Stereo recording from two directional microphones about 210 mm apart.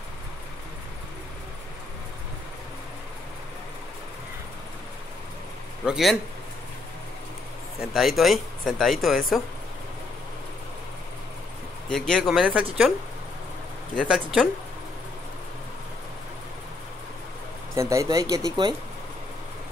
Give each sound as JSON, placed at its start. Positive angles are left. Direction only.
{"t": 5.9, "sound": "speech", "side_deg": 0}
{"t": 7.8, "sound": "speech", "side_deg": 0}
{"t": 11.9, "sound": "speech", "side_deg": 0}
{"t": 13.9, "sound": "speech", "side_deg": 0}
{"t": 17.7, "sound": "speech", "side_deg": -15}